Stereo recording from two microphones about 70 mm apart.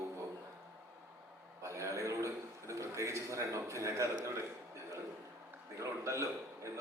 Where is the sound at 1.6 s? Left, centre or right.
Right.